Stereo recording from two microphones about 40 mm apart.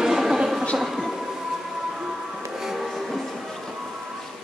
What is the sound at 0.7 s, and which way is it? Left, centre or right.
Music, centre.